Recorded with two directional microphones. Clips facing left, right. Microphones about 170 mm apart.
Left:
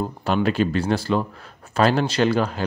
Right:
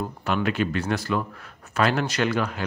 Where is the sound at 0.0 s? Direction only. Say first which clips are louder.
Left 4 dB; 30° left (ahead or behind).